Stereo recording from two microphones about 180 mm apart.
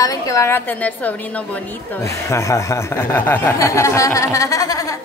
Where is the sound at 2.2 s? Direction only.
15° left (ahead or behind).